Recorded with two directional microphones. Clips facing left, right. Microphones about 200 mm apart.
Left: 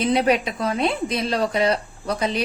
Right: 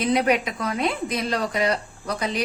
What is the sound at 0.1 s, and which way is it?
Speech, 30° left (ahead or behind).